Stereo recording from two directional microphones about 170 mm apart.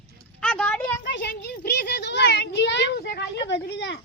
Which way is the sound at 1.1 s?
85° left.